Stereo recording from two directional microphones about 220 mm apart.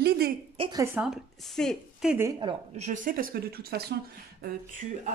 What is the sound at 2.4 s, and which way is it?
Speech, 25° right (ahead or behind).